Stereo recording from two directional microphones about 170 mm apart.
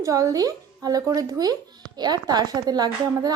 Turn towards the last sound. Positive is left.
turn(degrees=-25)  # may be behind; listen again after turning